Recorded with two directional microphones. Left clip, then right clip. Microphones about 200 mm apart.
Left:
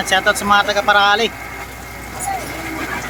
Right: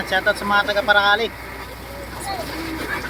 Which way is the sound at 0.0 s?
25° left (ahead or behind).